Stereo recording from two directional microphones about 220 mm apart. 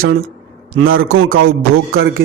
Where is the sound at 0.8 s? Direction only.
75° right (ahead or behind).